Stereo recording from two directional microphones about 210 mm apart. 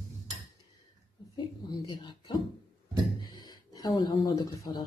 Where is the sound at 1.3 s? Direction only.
20° left (ahead or behind).